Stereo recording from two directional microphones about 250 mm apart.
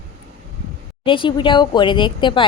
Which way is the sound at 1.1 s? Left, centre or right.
Centre.